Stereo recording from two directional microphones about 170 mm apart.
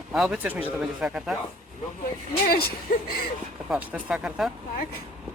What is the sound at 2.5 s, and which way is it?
Speech, 65° left (ahead or behind).